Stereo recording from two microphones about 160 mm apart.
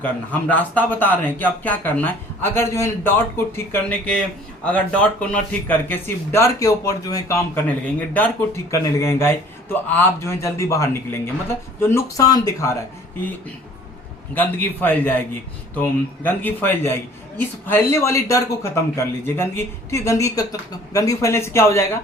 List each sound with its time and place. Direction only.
0.0 s speech: 10° left (ahead or behind)
14.3 s speech: 10° left (ahead or behind)